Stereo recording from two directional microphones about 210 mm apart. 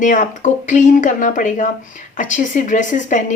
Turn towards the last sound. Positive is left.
turn(degrees=35)  # may be behind; listen again after turning